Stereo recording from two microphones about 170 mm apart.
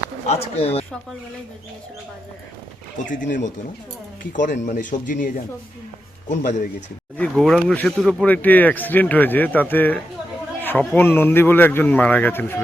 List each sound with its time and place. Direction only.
0.3 s speech: 35° left (ahead or behind)
4.2 s speech: 50° left (ahead or behind)
7.2 s speech: 5° left (ahead or behind)